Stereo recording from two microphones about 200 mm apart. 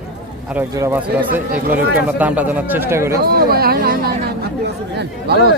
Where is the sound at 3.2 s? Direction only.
50° right (ahead or behind).